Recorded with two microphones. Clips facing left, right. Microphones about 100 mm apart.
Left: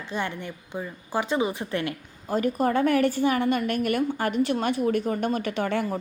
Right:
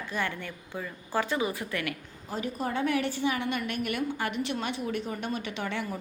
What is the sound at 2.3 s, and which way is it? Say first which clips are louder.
A woman's voice: left 9 dB; 50° left (ahead or behind).